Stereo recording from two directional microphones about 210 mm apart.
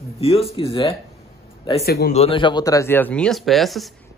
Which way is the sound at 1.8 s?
50° left (ahead or behind).